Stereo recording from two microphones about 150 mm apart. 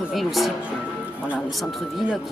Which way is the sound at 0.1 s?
Centre (ahead or behind).